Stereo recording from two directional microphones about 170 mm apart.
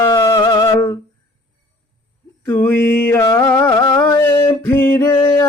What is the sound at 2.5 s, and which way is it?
Mantra, 15° left (ahead or behind).